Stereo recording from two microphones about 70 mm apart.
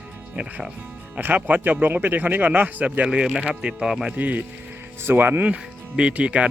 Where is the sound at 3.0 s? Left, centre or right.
Centre.